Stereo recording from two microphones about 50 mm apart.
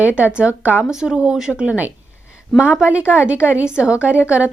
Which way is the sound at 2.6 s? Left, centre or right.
Right.